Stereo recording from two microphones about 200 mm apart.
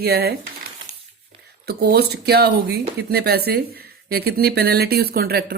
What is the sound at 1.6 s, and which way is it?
Speech, 55° right (ahead or behind).